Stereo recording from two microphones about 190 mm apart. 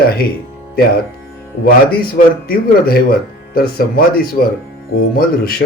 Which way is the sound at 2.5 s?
55° left (ahead or behind).